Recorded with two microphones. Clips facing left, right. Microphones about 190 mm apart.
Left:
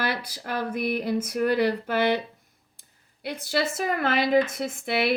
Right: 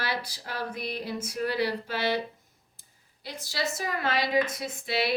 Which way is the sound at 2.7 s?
60° left (ahead or behind).